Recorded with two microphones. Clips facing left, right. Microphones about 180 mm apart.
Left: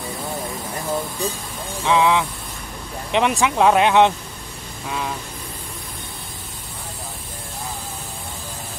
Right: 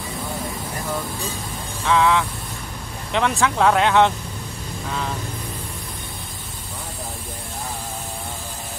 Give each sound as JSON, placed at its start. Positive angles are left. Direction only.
{"t": 1.9, "sound": "speech", "side_deg": 15}